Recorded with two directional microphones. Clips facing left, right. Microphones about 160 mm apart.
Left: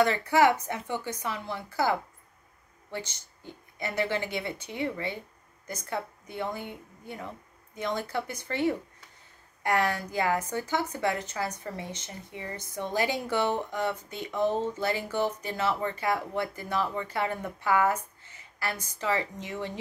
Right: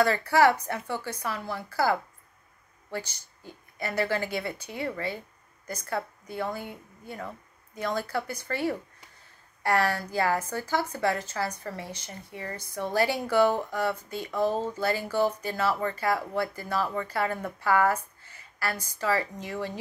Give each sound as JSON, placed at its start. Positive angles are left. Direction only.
{"t": 0.0, "sound": "speech", "side_deg": 20}